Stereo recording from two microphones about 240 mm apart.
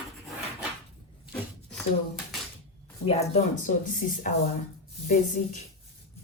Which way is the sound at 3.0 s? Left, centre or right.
Left.